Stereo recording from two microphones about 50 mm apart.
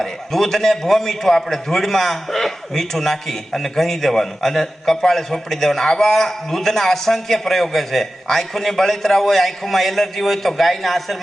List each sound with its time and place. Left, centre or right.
0.0 s a man's voice: centre